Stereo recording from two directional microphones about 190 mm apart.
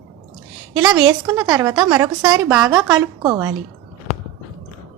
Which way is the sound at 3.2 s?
15° right (ahead or behind).